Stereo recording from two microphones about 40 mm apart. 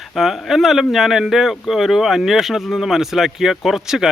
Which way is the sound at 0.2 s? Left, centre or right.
Centre.